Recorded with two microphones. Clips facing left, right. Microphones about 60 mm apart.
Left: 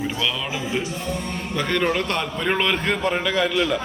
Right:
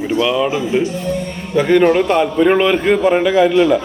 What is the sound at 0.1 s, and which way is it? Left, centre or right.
A man's voice, centre.